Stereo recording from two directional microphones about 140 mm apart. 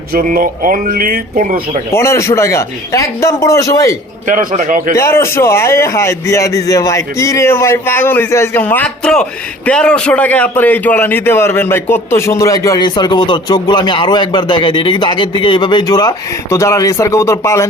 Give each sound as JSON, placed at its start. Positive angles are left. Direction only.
{"t": 0.1, "sound": "speech", "side_deg": -85}
{"t": 1.9, "sound": "a man's voice", "side_deg": 20}
{"t": 4.3, "sound": "a man's voice", "side_deg": -70}
{"t": 4.9, "sound": "a man's voice", "side_deg": 20}